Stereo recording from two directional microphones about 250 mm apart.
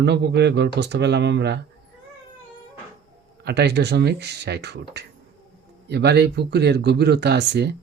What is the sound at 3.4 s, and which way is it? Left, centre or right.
Speech, right.